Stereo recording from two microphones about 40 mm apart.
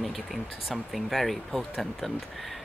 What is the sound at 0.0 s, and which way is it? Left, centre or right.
Speech, centre.